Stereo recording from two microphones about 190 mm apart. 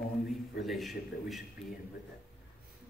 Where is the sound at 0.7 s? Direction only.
Centre (ahead or behind).